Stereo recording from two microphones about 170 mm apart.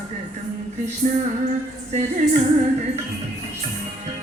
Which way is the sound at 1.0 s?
50° right (ahead or behind).